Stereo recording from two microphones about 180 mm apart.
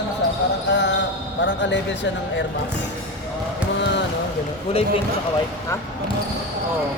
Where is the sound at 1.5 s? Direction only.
85° left.